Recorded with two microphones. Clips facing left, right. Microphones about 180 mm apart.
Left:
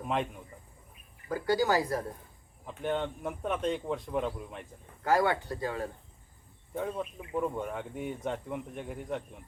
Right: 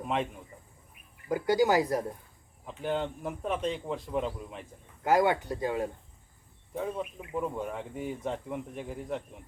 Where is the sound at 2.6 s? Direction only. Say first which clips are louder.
Even; centre (ahead or behind).